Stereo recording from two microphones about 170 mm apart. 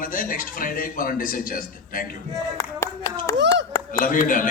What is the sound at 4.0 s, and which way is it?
Speech, 50° left (ahead or behind).